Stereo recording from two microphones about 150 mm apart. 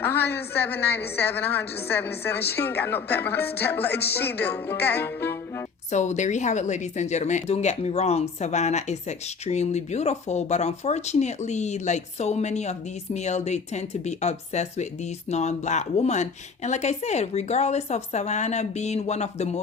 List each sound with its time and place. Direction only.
0.0 s a woman's voice: 15° left (ahead or behind)
3.8 s speech: 90° left
4.1 s speech: 15° left (ahead or behind)
5.9 s a woman's voice: 50° left (ahead or behind)